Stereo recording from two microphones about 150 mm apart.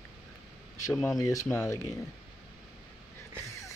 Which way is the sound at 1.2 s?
20° left (ahead or behind).